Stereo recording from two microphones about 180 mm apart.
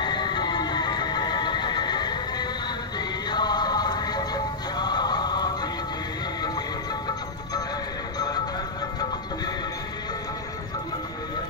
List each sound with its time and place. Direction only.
0.0 s music: 25° left (ahead or behind)